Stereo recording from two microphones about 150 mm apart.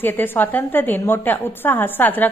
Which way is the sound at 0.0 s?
15° left (ahead or behind).